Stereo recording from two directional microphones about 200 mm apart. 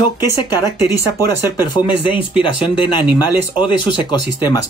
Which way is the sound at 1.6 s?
25° left (ahead or behind).